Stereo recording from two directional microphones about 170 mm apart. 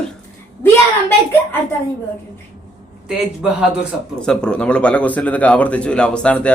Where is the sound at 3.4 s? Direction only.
5° right (ahead or behind).